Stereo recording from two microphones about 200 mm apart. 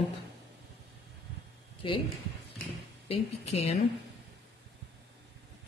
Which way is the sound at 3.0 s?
30° left (ahead or behind).